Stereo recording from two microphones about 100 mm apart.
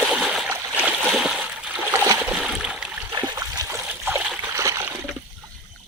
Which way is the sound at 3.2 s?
35° right (ahead or behind).